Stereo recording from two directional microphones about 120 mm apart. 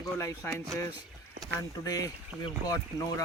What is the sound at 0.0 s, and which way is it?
Speech, 25° left (ahead or behind).